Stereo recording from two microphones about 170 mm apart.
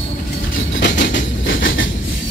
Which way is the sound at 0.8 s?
90° left.